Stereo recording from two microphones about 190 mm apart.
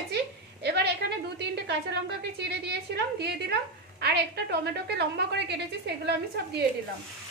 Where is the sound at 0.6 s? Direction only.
60° right (ahead or behind).